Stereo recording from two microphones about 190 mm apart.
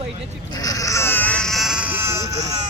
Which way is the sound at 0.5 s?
20° left (ahead or behind).